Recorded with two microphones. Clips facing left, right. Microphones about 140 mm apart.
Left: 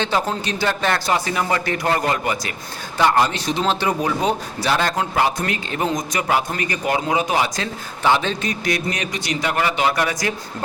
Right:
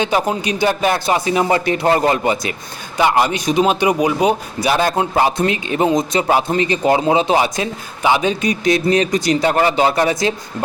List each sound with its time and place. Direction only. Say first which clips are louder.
0.0 s speech: right 4 dB; 15° right (ahead or behind)
3.0 s speech: right 2 dB; 10° right (ahead or behind)